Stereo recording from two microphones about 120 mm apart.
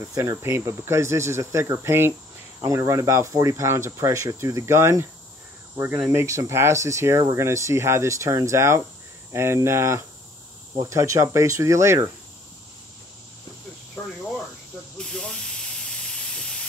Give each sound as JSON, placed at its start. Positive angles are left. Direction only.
{"t": 0.0, "sound": "speech", "side_deg": -25}
{"t": 15.0, "sound": "hiss", "side_deg": 5}